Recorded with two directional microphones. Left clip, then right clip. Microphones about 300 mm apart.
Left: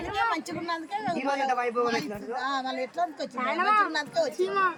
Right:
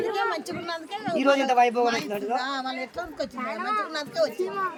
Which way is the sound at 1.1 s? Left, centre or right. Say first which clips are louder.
Right 9 dB; right.